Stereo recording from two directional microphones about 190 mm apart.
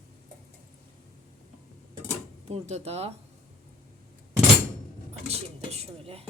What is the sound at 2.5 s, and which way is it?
Speech, 35° right (ahead or behind).